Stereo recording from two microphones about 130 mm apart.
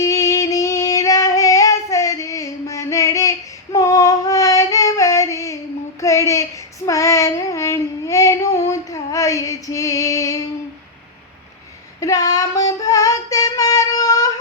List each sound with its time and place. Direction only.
0.0 s female singing: 25° left (ahead or behind)
6.0 s child singing: 25° left (ahead or behind)
11.9 s female singing: 25° left (ahead or behind)